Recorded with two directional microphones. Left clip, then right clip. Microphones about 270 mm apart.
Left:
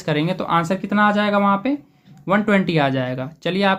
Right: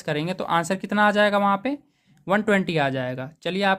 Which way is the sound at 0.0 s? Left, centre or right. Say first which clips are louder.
Left 5 dB; right.